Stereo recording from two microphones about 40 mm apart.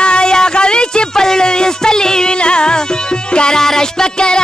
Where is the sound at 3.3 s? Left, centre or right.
Left.